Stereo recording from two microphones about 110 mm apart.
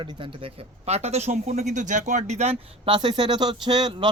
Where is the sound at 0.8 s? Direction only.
75° right (ahead or behind).